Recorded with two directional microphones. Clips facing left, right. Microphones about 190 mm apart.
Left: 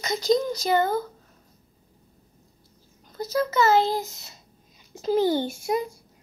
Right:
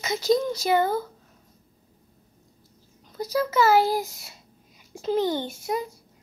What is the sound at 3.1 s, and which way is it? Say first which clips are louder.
A child's voice: even; 10° right (ahead or behind).